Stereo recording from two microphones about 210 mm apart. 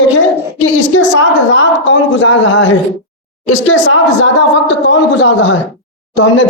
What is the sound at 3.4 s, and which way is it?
Speech, 65° left (ahead or behind).